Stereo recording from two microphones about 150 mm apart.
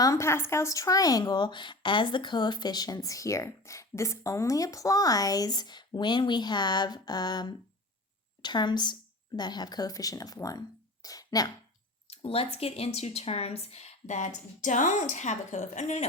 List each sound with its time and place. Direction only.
0.0 s speech: 20° left (ahead or behind)
11.0 s a sound: 25° left (ahead or behind)
12.1 s speech: 40° left (ahead or behind)